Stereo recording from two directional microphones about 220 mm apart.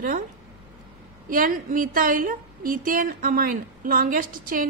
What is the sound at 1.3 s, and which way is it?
A woman's voice, 40° right (ahead or behind).